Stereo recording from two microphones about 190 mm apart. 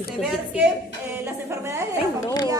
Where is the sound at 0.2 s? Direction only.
5° right (ahead or behind).